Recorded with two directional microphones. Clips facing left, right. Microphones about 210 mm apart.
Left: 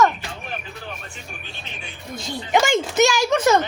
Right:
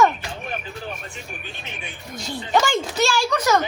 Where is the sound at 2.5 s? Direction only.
20° left (ahead or behind).